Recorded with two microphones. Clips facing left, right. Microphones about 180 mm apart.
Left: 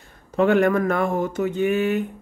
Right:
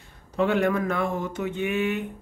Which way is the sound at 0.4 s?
50° left (ahead or behind).